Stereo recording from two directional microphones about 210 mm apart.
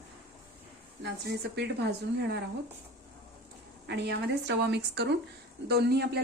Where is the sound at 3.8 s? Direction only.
55° right (ahead or behind).